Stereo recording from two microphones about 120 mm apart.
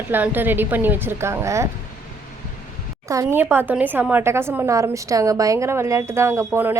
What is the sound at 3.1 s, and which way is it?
Speech, 25° right (ahead or behind).